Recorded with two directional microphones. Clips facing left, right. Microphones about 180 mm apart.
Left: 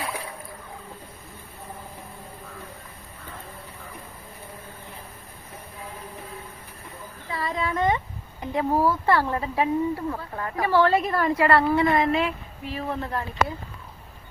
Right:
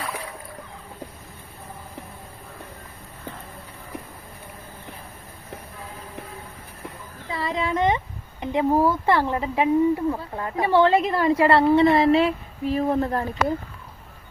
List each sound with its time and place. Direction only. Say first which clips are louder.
7.3 s speech: right 2 dB; 25° right (ahead or behind)